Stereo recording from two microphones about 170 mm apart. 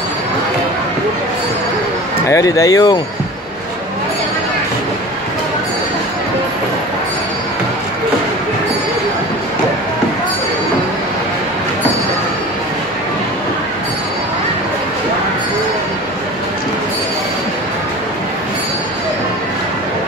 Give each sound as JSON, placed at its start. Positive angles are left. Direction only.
{"t": 2.2, "sound": "speech", "side_deg": 20}